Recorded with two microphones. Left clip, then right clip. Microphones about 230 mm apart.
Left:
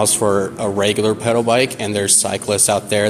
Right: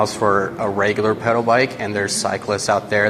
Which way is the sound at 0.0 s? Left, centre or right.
Left.